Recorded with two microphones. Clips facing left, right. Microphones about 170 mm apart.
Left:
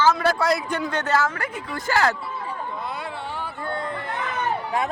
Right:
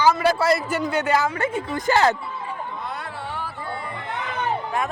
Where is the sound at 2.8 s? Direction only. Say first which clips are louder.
Left 1 dB; centre (ahead or behind).